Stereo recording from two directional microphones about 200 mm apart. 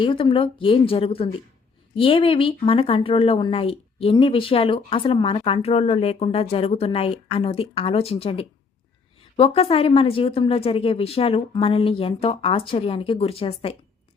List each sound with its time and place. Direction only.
0.0 s speech: 25° left (ahead or behind)